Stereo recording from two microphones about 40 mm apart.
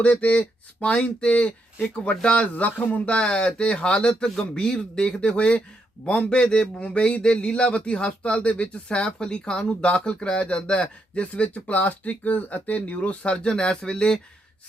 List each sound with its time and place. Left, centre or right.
0.0 s speech: left
3.1 s speech: left